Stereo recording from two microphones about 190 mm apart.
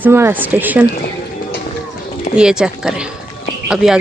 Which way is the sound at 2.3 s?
5° right (ahead or behind).